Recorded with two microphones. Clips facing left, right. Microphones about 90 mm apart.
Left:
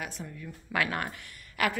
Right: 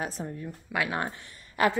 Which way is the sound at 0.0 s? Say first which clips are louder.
Right 5 dB; 35° right (ahead or behind).